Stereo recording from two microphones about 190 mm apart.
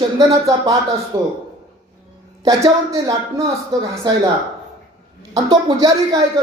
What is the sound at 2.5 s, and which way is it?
Speech, 20° right (ahead or behind).